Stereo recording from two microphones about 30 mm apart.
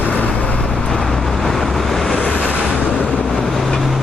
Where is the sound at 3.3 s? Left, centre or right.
Centre.